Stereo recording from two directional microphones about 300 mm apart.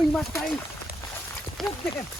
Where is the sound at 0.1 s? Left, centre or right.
Centre.